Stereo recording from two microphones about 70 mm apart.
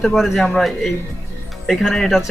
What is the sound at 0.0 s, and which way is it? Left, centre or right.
Speech, centre.